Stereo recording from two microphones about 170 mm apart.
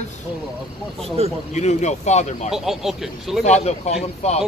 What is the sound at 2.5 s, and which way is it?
Speech, centre (ahead or behind).